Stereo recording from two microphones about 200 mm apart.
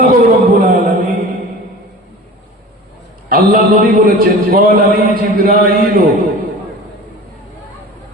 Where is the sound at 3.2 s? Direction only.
45° right (ahead or behind).